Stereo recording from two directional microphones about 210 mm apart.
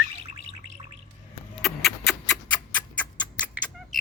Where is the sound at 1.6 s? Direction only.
Centre (ahead or behind).